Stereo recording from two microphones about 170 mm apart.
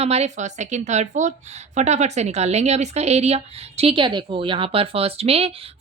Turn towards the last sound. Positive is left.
turn(degrees=-35)  # may be behind; listen again after turning